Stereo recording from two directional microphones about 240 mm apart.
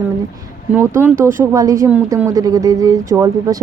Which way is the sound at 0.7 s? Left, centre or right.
Centre.